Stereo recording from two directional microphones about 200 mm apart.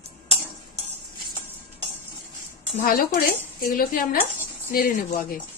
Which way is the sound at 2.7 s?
45° left (ahead or behind).